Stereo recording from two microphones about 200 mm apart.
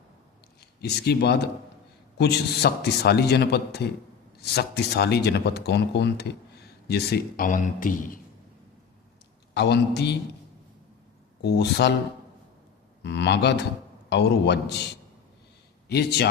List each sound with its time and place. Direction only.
0.6 s a man's voice: 55° left (ahead or behind)
9.6 s a man's voice: 55° left (ahead or behind)
11.4 s a man's voice: 55° left (ahead or behind)
13.0 s a man's voice: 55° left (ahead or behind)
15.9 s a man's voice: 55° left (ahead or behind)